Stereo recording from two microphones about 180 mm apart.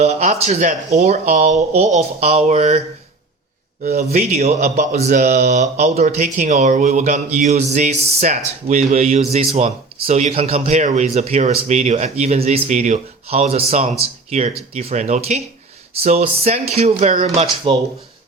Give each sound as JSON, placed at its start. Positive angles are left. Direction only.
{"t": 0.0, "sound": "speech", "side_deg": -40}
{"t": 4.1, "sound": "speech", "side_deg": -35}